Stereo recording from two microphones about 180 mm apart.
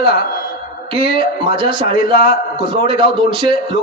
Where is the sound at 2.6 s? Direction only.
30° right (ahead or behind).